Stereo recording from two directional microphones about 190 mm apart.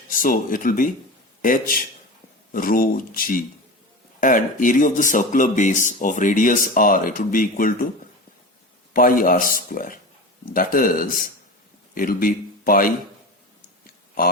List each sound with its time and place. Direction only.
0.1 s speech: 45° left (ahead or behind)
8.9 s speech: 45° left (ahead or behind)